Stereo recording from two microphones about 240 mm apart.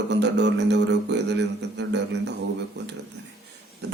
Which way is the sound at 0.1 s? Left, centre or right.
Right.